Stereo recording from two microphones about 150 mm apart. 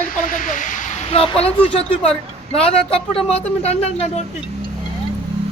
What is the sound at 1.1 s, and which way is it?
Speech, 40° left (ahead or behind).